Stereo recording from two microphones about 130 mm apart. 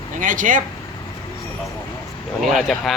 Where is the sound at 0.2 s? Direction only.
90° right.